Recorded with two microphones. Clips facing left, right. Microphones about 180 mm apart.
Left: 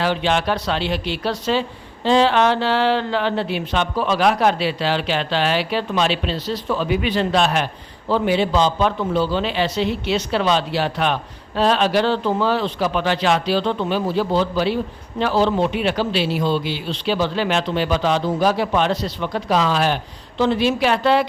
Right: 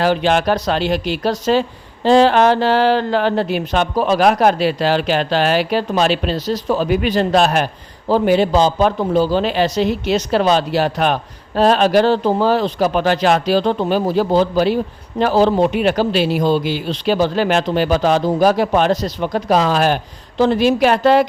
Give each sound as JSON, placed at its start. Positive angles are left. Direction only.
{"t": 0.0, "sound": "speech", "side_deg": -45}